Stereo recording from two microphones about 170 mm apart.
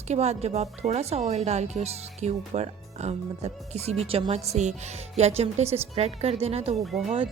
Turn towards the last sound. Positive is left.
turn(degrees=0)  # may be behind; listen again after turning